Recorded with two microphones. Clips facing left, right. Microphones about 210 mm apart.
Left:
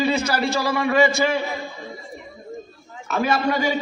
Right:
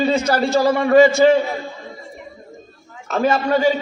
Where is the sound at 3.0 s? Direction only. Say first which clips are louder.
Right 3 dB; 35° right (ahead or behind).